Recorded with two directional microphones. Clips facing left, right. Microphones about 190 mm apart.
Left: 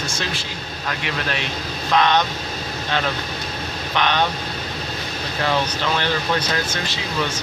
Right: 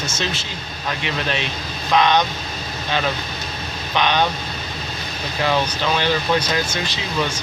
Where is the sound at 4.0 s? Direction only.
15° right (ahead or behind).